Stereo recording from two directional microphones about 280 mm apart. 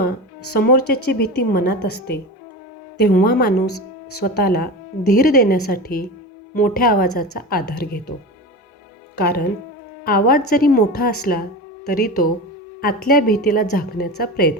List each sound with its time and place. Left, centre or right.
0.5 s speech: left
9.1 s speech: left